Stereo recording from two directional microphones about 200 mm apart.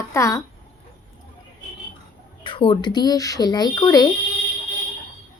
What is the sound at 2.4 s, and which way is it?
Speech, 25° left (ahead or behind).